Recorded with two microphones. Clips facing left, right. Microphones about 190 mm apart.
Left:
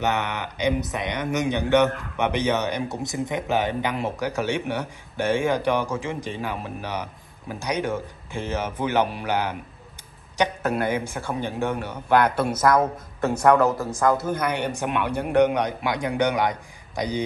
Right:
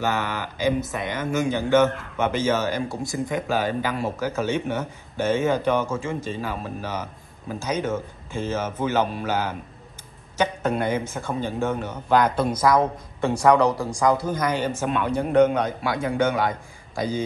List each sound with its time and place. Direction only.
0.0 s a man's voice: 20° left (ahead or behind)
14.3 s speech: 60° left (ahead or behind)
14.7 s speech: 15° left (ahead or behind)